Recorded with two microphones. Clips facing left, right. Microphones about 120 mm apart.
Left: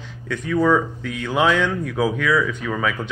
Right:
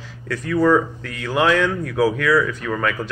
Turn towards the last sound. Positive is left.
turn(degrees=0)  # may be behind; listen again after turning